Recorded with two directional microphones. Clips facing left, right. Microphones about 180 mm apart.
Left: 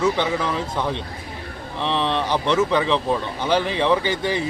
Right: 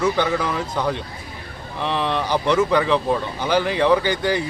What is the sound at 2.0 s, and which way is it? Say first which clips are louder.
Speech: right 2 dB; 25° left (ahead or behind).